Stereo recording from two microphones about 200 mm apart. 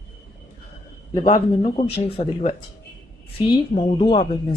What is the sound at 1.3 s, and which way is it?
Speech, 25° left (ahead or behind).